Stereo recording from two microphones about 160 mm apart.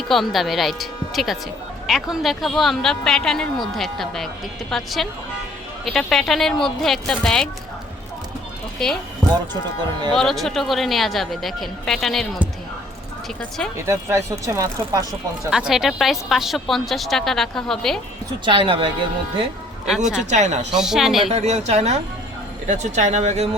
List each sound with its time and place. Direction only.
0.1 s speech: centre (ahead or behind)
10.2 s speech: centre (ahead or behind)
13.8 s speech: 15° right (ahead or behind)
15.4 s speech: 5° right (ahead or behind)
18.4 s a woman's voice: 30° right (ahead or behind)
19.8 s speech: 5° right (ahead or behind)
20.3 s speech: 45° right (ahead or behind)
20.7 s speech: 5° right (ahead or behind)
21.2 s a woman's voice: 40° right (ahead or behind)